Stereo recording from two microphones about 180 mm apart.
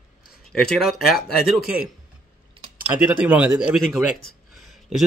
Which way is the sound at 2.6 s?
30° right (ahead or behind).